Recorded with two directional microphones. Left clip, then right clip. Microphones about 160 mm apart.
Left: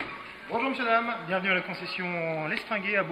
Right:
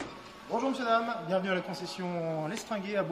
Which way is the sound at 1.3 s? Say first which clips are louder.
Left 4 dB; 25° right (ahead or behind).